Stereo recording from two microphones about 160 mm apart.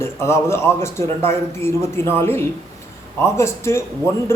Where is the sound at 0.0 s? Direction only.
15° left (ahead or behind).